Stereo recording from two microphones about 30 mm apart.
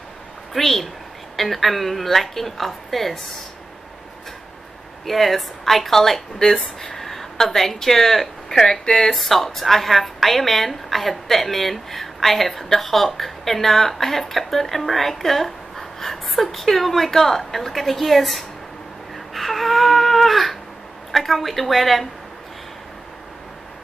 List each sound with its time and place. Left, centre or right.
0.5 s a woman's voice: centre
5.0 s a woman's voice: centre
8.8 s speech: left
9.1 s a woman's voice: centre
19.3 s baby cry: centre
21.1 s a woman's voice: centre